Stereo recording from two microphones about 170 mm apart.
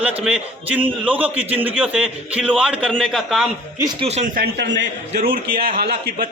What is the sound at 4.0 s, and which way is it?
Speech, 40° right (ahead or behind).